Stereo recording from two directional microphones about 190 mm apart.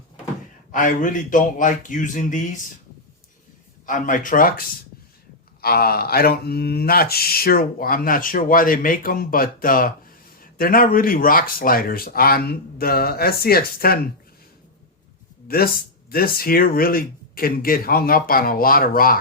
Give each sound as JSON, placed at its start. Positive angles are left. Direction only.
{"t": 0.7, "sound": "speech", "side_deg": 45}
{"t": 3.8, "sound": "speech", "side_deg": 45}
{"t": 5.6, "sound": "speech", "side_deg": 50}
{"t": 15.4, "sound": "speech", "side_deg": 50}